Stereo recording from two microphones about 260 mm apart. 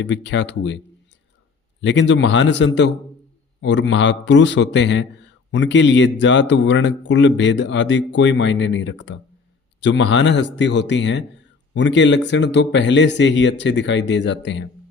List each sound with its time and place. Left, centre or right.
0.0 s a man's voice: left
1.8 s a man's voice: left